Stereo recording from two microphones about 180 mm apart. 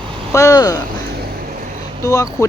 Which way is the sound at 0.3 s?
20° left (ahead or behind).